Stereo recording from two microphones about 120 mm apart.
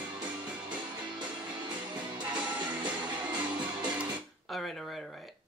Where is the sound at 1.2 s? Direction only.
40° right (ahead or behind).